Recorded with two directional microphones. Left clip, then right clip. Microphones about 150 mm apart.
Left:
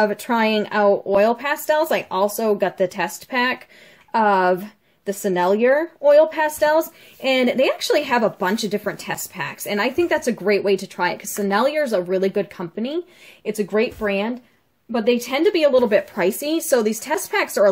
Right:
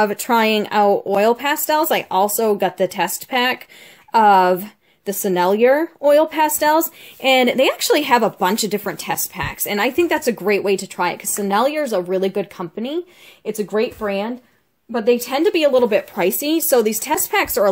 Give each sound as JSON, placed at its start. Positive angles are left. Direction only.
{"t": 0.0, "sound": "a woman's voice", "side_deg": -40}